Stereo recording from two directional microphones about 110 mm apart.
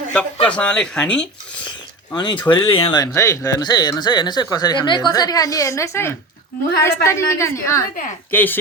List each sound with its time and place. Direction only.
0.1 s speech: 10° left (ahead or behind)
2.1 s speech: 45° left (ahead or behind)
3.2 s a woman's voice: 30° left (ahead or behind)
3.6 s a woman's voice: 40° left (ahead or behind); by 8.5 s 15° left (ahead or behind)